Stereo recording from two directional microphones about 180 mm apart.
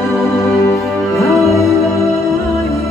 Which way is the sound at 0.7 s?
15° left (ahead or behind).